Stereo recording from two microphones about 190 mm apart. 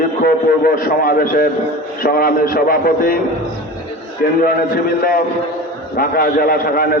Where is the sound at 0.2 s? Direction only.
50° left (ahead or behind).